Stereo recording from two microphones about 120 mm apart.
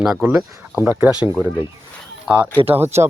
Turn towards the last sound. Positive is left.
turn(degrees=-20)  # may be behind; listen again after turning